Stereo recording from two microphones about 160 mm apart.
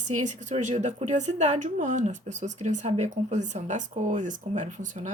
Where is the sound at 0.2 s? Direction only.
50° right (ahead or behind).